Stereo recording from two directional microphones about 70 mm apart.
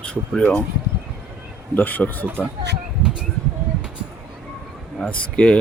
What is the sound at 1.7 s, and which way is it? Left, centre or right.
Speech, left.